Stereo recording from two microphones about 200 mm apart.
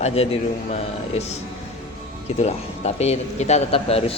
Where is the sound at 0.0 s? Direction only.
30° left (ahead or behind).